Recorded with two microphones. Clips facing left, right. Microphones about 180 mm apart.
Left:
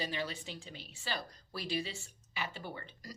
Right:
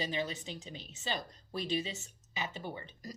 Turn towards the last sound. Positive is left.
turn(degrees=-20)  # may be behind; listen again after turning